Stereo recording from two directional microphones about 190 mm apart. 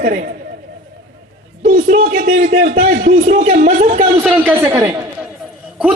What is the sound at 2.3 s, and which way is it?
A man's voice, 40° right (ahead or behind).